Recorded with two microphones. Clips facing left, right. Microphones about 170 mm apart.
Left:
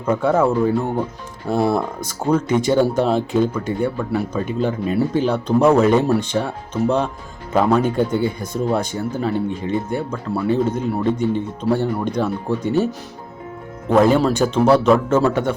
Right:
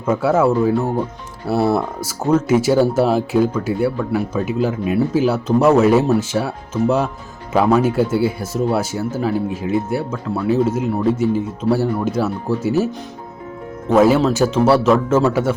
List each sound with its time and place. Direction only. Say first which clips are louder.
0.0 s speech: right 1 dB; 5° right (ahead or behind)
1.7 s speech: right 2 dB; 5° right (ahead or behind)
13.9 s speech: right 1 dB; 5° right (ahead or behind)